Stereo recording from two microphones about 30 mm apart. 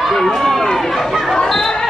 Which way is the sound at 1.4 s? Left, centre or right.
Centre.